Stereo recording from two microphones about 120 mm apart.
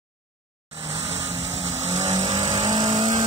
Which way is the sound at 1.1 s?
55° right (ahead or behind).